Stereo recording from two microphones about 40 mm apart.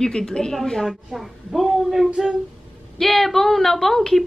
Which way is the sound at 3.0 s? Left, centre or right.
Centre.